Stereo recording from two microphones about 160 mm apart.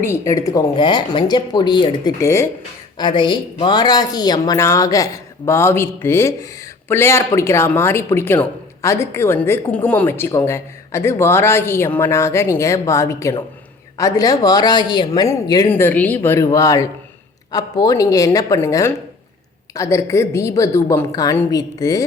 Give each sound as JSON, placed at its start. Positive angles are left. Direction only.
{"t": 0.0, "sound": "a woman's voice", "side_deg": 20}
{"t": 3.0, "sound": "a woman's voice", "side_deg": 30}
{"t": 15.7, "sound": "a woman's voice", "side_deg": 10}